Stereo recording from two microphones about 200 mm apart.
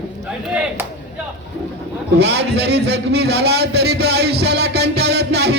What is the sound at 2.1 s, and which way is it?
A man's voice, 60° right (ahead or behind).